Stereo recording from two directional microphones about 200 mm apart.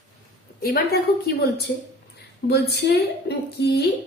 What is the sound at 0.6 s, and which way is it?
A woman's voice, 50° left (ahead or behind).